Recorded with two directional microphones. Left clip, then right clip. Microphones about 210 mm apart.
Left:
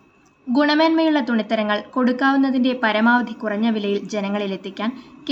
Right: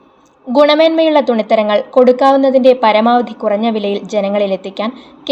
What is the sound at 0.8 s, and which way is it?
A woman's voice, 15° right (ahead or behind).